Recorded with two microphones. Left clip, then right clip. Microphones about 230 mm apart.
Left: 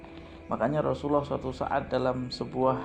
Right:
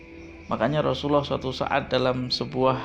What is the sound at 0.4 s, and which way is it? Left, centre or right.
Speech, right.